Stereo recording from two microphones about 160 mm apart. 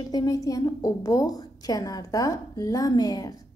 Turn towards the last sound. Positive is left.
turn(degrees=25)  # may be behind; listen again after turning